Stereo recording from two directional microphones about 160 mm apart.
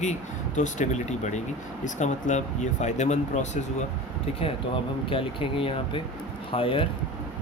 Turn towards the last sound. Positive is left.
turn(degrees=35)  # may be behind; listen again after turning